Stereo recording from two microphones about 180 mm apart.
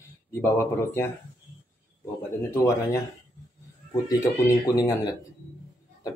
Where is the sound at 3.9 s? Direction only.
20° left (ahead or behind).